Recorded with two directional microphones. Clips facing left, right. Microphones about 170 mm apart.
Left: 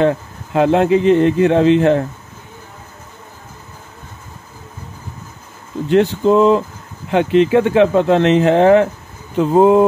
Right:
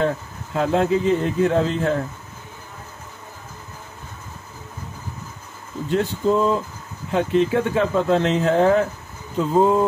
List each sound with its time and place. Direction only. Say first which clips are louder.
0.0 s speech: left 7 dB; 70° left (ahead or behind)
5.9 s speech: left 7 dB; 75° left (ahead or behind)